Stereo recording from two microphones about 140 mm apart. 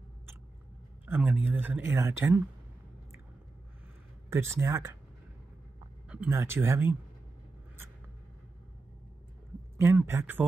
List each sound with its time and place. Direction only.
1.0 s speech: 10° right (ahead or behind)
4.3 s speech: 20° right (ahead or behind)
6.0 s a sound: 10° right (ahead or behind)
6.3 s speech: 15° right (ahead or behind)
9.8 s speech: 20° right (ahead or behind)